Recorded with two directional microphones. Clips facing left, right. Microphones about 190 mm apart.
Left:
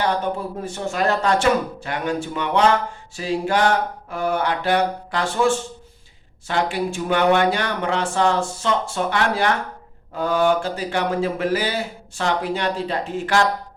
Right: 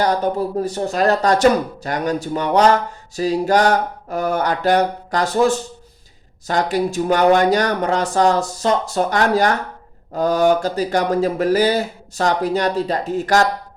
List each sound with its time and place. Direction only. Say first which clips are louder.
0.0 s speech: right 4 dB; 40° right (ahead or behind)